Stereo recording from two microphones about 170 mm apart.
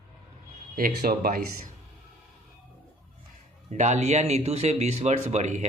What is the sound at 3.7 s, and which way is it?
Speech, 45° right (ahead or behind).